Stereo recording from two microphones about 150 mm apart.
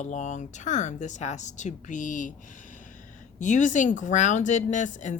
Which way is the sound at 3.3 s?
55° left (ahead or behind).